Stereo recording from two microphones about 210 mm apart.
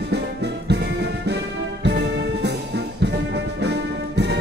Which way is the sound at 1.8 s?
55° right (ahead or behind).